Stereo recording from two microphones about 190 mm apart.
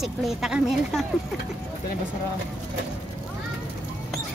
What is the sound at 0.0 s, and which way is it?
Speech, centre (ahead or behind).